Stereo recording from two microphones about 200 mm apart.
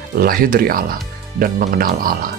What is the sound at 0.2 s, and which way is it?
Speech, 45° right (ahead or behind).